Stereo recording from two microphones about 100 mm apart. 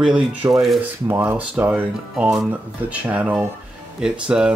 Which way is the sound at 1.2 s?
15° right (ahead or behind).